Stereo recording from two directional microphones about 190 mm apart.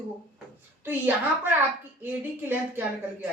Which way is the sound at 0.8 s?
10° right (ahead or behind).